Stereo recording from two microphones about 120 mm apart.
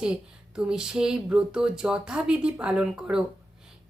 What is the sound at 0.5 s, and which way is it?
Speech, 5° right (ahead or behind).